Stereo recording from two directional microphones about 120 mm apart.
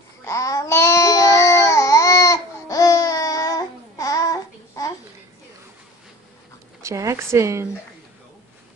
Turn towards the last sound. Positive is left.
turn(degrees=-25)  # may be behind; listen again after turning